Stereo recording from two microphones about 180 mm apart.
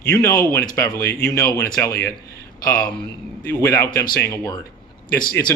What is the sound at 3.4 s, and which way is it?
A man's voice, 15° left (ahead or behind).